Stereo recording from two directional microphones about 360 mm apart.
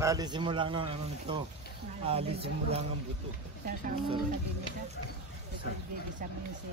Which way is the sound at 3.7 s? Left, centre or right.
Right.